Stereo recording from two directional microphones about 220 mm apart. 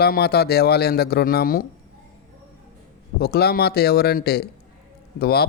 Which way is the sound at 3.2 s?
45° left (ahead or behind).